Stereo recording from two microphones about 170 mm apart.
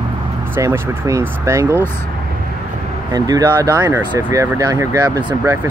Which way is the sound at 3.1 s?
20° right (ahead or behind).